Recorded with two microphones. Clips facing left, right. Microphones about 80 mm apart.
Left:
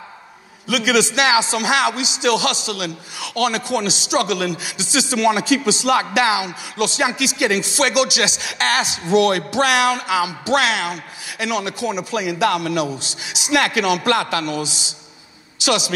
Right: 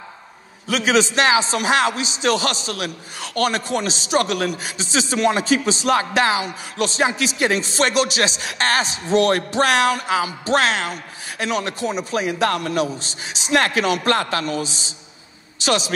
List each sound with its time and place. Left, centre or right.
0.7 s a man's voice: right